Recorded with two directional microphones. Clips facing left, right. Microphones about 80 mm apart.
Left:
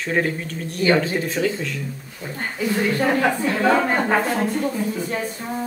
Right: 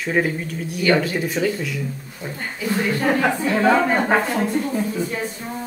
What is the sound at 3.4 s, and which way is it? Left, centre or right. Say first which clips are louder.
Speech: right 1 dB; centre.